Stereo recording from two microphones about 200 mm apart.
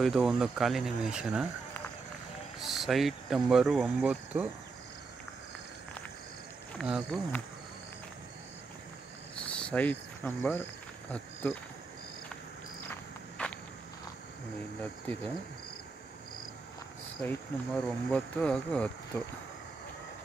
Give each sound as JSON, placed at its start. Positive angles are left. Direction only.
{"t": 0.0, "sound": "speech", "side_deg": -5}
{"t": 2.6, "sound": "speech", "side_deg": 0}
{"t": 6.8, "sound": "speech", "side_deg": 5}
{"t": 9.4, "sound": "cricket", "side_deg": 5}
{"t": 11.1, "sound": "speech", "side_deg": 5}
{"t": 13.4, "sound": "walk", "side_deg": 5}
{"t": 14.8, "sound": "speech", "side_deg": 10}
{"t": 17.8, "sound": "speech", "side_deg": 5}